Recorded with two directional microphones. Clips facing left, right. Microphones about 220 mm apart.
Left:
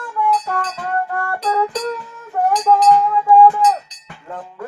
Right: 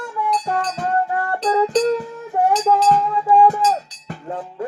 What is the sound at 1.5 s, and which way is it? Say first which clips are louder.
Music: right 5 dB; 30° right (ahead or behind).